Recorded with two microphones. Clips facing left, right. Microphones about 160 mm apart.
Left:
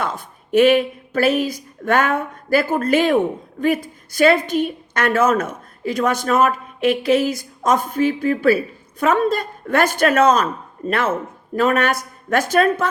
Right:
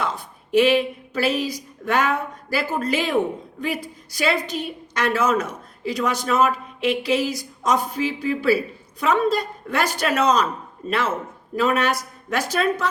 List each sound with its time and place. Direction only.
0.0 s a woman's voice: 50° left (ahead or behind)